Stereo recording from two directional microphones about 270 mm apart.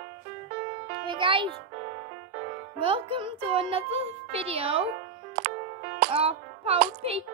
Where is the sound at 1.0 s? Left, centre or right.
Centre.